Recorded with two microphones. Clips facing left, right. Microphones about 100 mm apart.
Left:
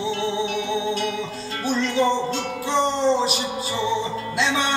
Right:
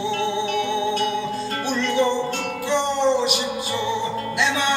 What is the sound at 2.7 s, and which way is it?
Music, 35° left (ahead or behind).